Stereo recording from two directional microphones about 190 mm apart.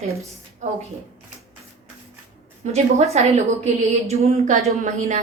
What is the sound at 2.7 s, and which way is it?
A woman's voice, 35° right (ahead or behind).